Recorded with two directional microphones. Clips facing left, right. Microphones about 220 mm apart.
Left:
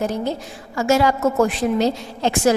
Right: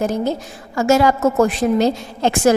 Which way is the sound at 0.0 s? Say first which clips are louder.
Right 3 dB; 45° right (ahead or behind).